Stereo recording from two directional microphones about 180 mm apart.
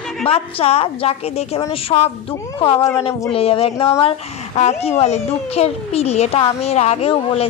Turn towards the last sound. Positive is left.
turn(degrees=35)  # may be behind; listen again after turning